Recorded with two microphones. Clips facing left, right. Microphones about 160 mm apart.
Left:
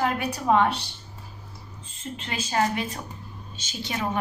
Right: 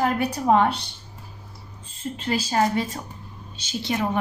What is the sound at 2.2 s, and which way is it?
Speech, 35° right (ahead or behind).